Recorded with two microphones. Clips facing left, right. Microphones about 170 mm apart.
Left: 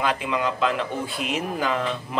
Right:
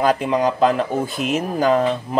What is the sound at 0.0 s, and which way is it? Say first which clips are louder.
Speech: right 7 dB; 40° right (ahead or behind).